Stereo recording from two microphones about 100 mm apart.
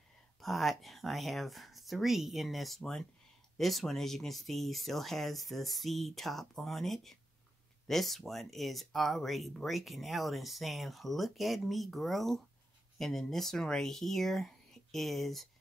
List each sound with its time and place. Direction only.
0.4 s speech: centre (ahead or behind)